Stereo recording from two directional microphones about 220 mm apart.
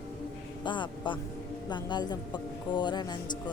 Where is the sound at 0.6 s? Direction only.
20° left (ahead or behind).